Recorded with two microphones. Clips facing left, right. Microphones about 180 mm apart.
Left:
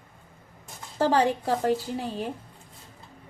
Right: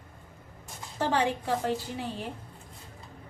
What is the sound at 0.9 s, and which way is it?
Speech, 40° left (ahead or behind).